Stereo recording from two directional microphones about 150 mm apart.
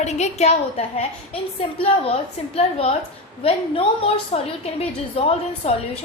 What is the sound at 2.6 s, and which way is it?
A woman's voice, 45° left (ahead or behind).